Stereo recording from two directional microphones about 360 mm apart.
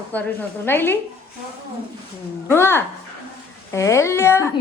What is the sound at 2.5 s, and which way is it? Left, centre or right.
A woman's voice, centre.